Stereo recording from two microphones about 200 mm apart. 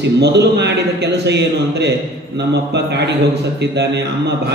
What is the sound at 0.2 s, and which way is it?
A man's voice, 55° right (ahead or behind).